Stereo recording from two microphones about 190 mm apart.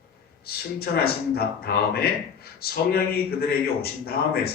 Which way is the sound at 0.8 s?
55° left (ahead or behind).